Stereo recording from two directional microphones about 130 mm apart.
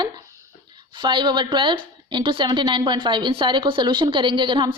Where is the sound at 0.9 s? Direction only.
35° right (ahead or behind).